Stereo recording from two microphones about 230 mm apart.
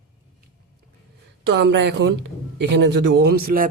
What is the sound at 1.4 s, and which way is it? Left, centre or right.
A man's voice, right.